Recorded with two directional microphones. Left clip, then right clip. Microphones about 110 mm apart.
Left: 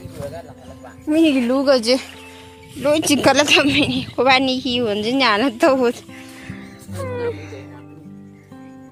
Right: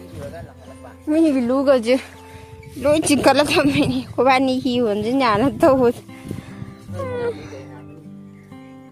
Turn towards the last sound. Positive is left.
turn(degrees=-5)  # may be behind; listen again after turning